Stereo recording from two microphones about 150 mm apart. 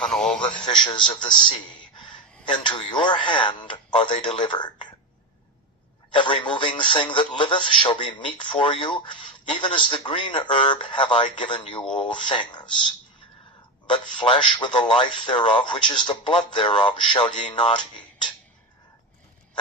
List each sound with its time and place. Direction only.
0.0 s a man's voice: 5° left (ahead or behind)
0.6 s a man's voice: 30° left (ahead or behind)
6.1 s speech: 35° left (ahead or behind)